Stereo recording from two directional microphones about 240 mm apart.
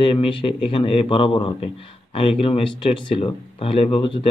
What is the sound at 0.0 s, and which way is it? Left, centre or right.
Speech, left.